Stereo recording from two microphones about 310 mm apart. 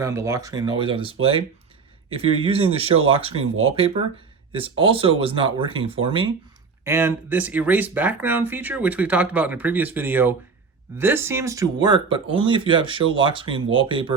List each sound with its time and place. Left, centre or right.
0.0 s speech: centre
4.8 s speech: centre